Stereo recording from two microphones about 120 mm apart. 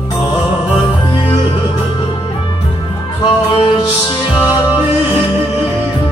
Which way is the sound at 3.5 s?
40° left (ahead or behind).